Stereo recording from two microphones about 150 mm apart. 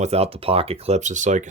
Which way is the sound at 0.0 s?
45° right (ahead or behind).